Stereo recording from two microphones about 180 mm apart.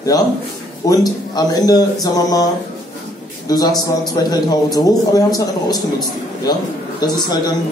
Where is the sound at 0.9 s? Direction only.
20° left (ahead or behind).